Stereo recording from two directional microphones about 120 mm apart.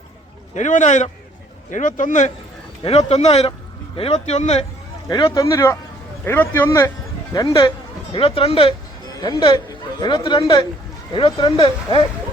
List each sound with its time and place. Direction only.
0.5 s a man's voice: 90° left
2.8 s speech: 60° left (ahead or behind)
5.0 s speech: 35° left (ahead or behind)
7.3 s speech: 35° left (ahead or behind)
8.1 s speech: 50° left (ahead or behind)